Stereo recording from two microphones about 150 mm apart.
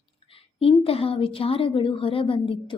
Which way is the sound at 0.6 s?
40° left (ahead or behind).